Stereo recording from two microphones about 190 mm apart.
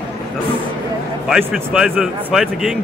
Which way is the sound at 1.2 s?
5° right (ahead or behind).